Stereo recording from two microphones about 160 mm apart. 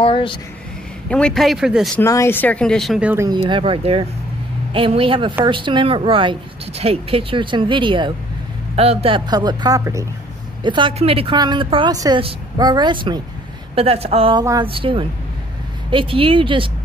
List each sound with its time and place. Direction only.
0.0 s a sound: 35° left (ahead or behind)
1.0 s speech: 5° left (ahead or behind)
2.0 s speech: 15° left (ahead or behind); by 3.3 s 10° right (ahead or behind)
3.4 s a woman's voice: 35° right (ahead or behind)